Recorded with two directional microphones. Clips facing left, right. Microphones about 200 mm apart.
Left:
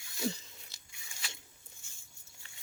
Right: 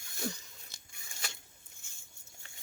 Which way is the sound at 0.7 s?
50° right (ahead or behind).